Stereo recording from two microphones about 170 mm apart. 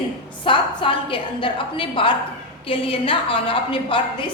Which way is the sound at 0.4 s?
30° left (ahead or behind).